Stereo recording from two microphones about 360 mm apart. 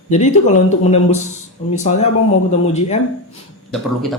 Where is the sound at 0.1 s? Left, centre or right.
Centre.